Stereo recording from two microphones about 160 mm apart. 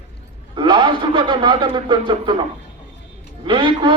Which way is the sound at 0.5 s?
30° right (ahead or behind).